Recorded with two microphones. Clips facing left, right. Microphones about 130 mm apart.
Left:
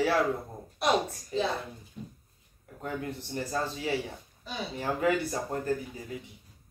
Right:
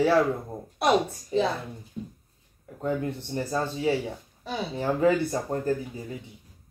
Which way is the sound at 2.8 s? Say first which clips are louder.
Right 7 dB; 25° right (ahead or behind).